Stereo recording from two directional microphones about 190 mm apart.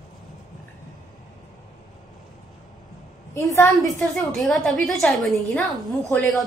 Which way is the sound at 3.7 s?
Centre (ahead or behind).